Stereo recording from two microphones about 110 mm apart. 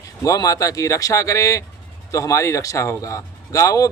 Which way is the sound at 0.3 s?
30° left (ahead or behind).